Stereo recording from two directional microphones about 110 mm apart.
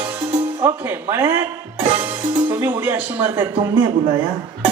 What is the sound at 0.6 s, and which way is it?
Speech, 20° right (ahead or behind).